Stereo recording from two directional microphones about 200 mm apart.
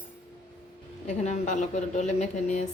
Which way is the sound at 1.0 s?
35° left (ahead or behind).